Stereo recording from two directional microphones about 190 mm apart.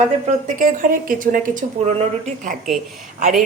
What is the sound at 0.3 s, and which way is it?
Speech, 40° right (ahead or behind).